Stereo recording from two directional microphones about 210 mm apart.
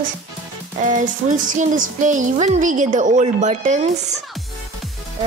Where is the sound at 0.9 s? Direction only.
35° right (ahead or behind).